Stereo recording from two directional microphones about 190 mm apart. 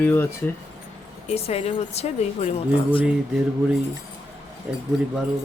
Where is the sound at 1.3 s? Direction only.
30° left (ahead or behind).